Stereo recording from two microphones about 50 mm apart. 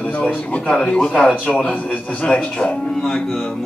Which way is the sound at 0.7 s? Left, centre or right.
Centre.